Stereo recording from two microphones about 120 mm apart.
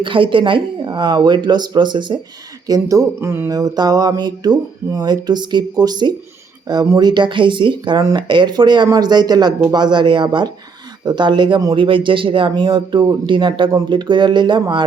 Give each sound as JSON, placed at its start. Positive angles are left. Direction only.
{"t": 0.0, "sound": "speech", "side_deg": -45}
{"t": 2.6, "sound": "speech", "side_deg": -30}
{"t": 3.6, "sound": "speech", "side_deg": -30}